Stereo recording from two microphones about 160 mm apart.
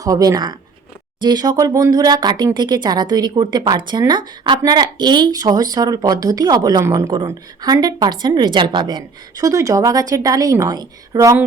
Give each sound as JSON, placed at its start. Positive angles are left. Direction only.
{"t": 0.0, "sound": "speech", "side_deg": -25}